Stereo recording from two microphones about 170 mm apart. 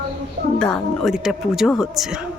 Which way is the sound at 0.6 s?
5° left (ahead or behind).